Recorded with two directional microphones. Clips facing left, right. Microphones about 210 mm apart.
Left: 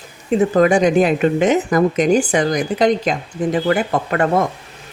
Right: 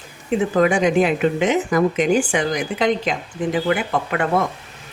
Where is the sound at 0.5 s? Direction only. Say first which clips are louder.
Left 3 dB; 40° left (ahead or behind).